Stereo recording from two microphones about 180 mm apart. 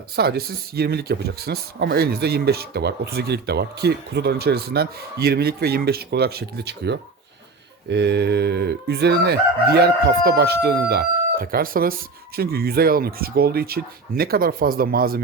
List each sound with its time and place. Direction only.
0.2 s speech: 60° right (ahead or behind)